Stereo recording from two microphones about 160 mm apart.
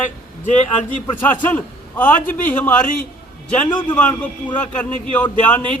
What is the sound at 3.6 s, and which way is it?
Speech, 30° left (ahead or behind).